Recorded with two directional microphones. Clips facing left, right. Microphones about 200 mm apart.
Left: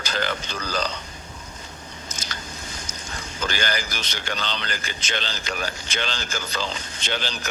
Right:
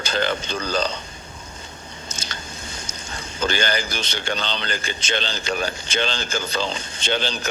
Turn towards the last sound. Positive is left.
turn(degrees=-25)  # may be behind; listen again after turning